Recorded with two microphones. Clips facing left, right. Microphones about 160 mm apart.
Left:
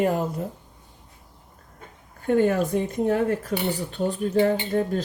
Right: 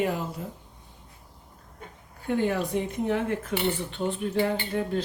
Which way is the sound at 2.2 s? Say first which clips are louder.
Left 6 dB; 50° left (ahead or behind).